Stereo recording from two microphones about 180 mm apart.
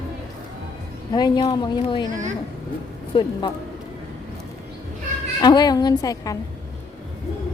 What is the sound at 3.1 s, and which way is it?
Speech, 30° left (ahead or behind).